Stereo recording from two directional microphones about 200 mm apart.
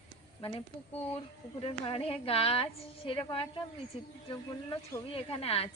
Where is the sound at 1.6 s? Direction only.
25° left (ahead or behind).